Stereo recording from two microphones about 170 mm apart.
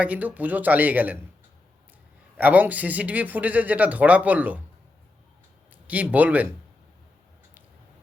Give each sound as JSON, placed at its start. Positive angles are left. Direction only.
{"t": 0.0, "sound": "speech", "side_deg": -10}
{"t": 2.4, "sound": "speech", "side_deg": -10}
{"t": 5.7, "sound": "speech", "side_deg": -10}